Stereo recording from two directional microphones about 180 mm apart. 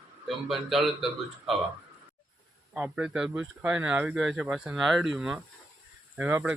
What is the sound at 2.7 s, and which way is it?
Speech, 5° right (ahead or behind).